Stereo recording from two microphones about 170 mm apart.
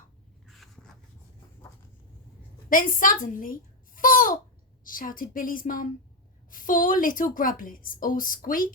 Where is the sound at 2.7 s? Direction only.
50° left (ahead or behind).